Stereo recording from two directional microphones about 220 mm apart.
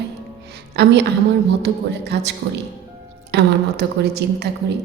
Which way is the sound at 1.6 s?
50° right (ahead or behind).